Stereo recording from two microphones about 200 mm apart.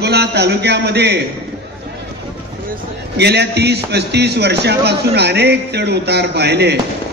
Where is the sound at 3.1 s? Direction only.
55° right (ahead or behind).